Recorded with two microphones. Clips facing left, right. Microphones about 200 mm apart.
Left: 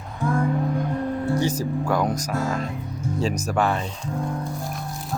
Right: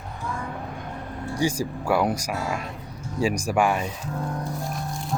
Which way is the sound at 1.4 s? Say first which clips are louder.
Left 2 dB; 10° right (ahead or behind).